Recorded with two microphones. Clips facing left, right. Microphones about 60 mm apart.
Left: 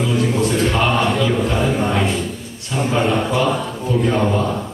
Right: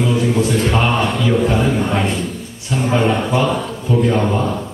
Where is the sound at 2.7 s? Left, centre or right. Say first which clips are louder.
Right 2 dB; centre.